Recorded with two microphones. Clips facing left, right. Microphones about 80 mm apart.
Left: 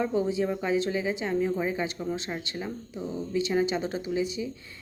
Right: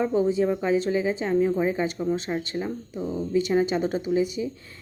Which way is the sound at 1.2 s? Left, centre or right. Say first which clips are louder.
Right 5 dB; centre.